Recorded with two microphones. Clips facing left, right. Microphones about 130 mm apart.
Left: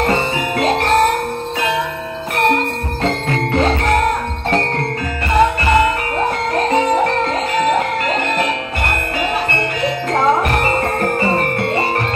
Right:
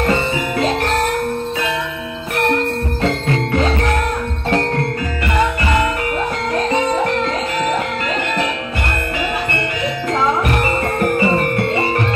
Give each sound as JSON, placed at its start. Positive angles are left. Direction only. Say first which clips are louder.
{"t": 0.7, "sound": "music", "louder": "left 6 dB", "side_deg": 30}
{"t": 2.3, "sound": "music", "louder": "left 1 dB", "side_deg": 35}
{"t": 6.5, "sound": "music", "louder": "left 2 dB", "side_deg": 35}
{"t": 10.1, "sound": "music", "louder": "left 2 dB", "side_deg": 40}